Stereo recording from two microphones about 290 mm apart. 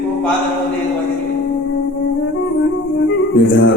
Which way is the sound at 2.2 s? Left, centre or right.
Left.